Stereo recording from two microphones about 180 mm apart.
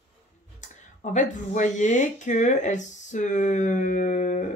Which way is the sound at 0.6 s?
40° left (ahead or behind).